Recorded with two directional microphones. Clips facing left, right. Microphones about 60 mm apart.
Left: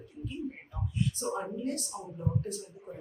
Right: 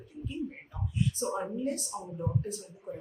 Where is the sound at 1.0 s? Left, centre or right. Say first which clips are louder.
Right 1 dB; centre.